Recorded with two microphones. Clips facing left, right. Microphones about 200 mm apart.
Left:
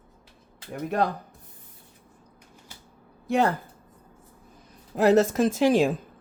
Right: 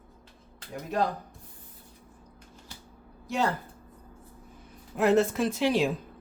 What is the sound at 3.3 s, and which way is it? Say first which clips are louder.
Speech: left 5 dB; 55° left (ahead or behind).